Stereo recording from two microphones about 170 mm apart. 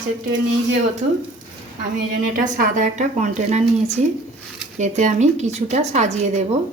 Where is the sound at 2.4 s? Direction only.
50° right (ahead or behind).